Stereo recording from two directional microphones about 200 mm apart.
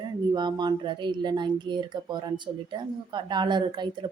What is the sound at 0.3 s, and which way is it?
Speech, 20° right (ahead or behind).